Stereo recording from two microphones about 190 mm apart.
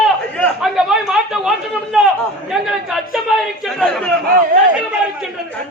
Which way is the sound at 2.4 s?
Centre (ahead or behind).